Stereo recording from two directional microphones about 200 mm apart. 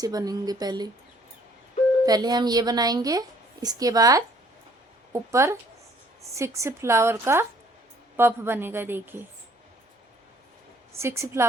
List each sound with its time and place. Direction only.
0.0 s a woman's voice: 20° right (ahead or behind)
2.0 s a woman's voice: 20° right (ahead or behind)
10.9 s a woman's voice: 15° right (ahead or behind)